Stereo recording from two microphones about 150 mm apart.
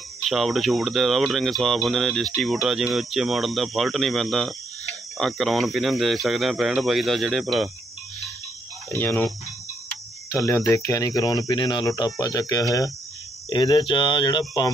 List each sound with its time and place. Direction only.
0.2 s speech: centre (ahead or behind)
8.9 s speech: 10° left (ahead or behind)
10.3 s speech: 20° left (ahead or behind)